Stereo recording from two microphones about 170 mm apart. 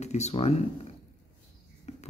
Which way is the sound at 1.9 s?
40° left (ahead or behind).